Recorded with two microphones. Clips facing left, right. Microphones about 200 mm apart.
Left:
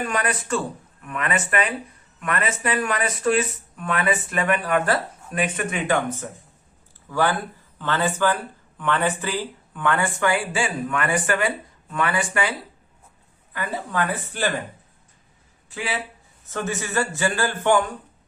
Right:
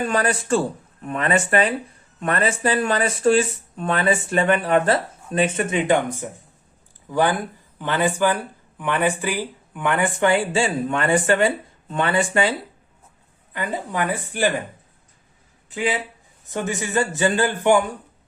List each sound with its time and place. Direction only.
0.0 s a man's voice: 30° right (ahead or behind); by 14.5 s 15° right (ahead or behind)
15.7 s a man's voice: 20° right (ahead or behind)